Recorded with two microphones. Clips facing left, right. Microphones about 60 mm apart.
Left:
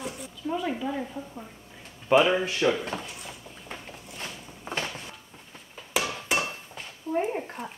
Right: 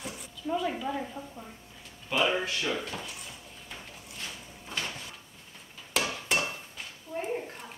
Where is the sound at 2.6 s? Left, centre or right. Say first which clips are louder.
Left 13 dB; left.